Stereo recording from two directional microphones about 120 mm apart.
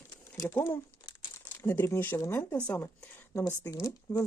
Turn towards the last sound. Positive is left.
turn(degrees=30)  # may be behind; listen again after turning